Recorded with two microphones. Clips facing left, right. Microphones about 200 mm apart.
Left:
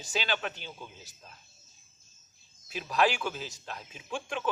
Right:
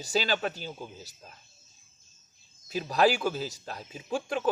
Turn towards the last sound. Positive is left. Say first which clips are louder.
# right 5 dB
turn(degrees=-40)  # may be behind; listen again after turning